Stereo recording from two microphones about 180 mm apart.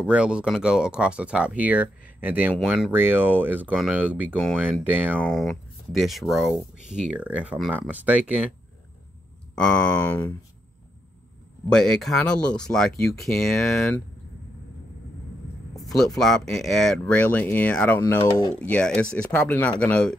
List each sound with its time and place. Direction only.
0.0 s speech: 5° right (ahead or behind)
5.2 s speech: centre (ahead or behind)
9.6 s speech: 5° left (ahead or behind)
11.7 s speech: 5° left (ahead or behind)
15.7 s speech: centre (ahead or behind)